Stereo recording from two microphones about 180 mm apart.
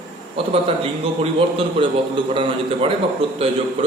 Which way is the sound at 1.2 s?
30° right (ahead or behind).